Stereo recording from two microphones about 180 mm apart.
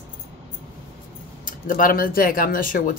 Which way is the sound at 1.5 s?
50° left (ahead or behind).